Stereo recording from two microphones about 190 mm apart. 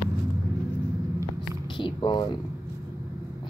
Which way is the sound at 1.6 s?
25° left (ahead or behind).